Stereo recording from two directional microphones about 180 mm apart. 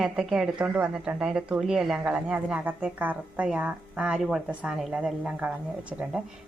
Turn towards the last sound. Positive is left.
turn(degrees=-5)  # may be behind; listen again after turning